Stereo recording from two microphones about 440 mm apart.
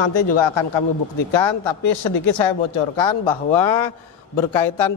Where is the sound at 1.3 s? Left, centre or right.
Left.